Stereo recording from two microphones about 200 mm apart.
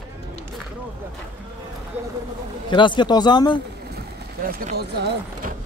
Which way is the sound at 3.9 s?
50° right (ahead or behind).